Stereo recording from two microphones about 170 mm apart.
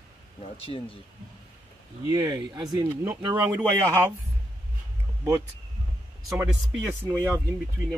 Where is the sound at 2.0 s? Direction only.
20° right (ahead or behind).